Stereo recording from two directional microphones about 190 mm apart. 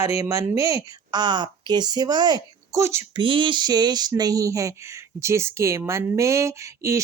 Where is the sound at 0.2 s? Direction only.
15° right (ahead or behind).